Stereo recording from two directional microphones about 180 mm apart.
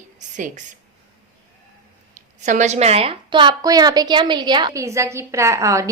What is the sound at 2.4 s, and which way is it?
A woman's voice, 40° right (ahead or behind).